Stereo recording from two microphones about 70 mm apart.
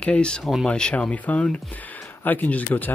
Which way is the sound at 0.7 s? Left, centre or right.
Centre.